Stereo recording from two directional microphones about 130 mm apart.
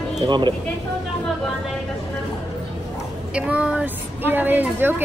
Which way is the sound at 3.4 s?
10° right (ahead or behind).